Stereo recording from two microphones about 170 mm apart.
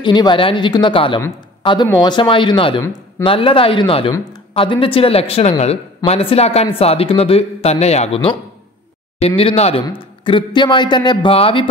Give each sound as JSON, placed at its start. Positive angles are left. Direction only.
{"t": 0.0, "sound": "speech", "side_deg": 25}
{"t": 2.8, "sound": "speech", "side_deg": 15}
{"t": 3.3, "sound": "speech", "side_deg": 30}
{"t": 4.6, "sound": "speech", "side_deg": 30}
{"t": 9.4, "sound": "speech", "side_deg": 35}